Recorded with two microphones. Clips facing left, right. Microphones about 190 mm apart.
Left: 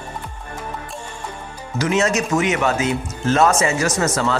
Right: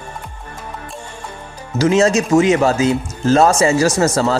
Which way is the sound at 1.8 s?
30° right (ahead or behind).